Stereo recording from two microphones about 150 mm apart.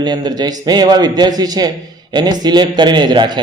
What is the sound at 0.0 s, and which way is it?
A man's voice, 30° right (ahead or behind).